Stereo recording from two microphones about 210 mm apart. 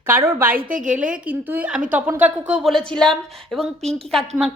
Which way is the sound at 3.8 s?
30° right (ahead or behind).